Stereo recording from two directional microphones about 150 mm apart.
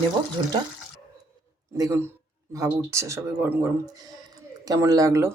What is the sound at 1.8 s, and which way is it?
Speech, 20° right (ahead or behind).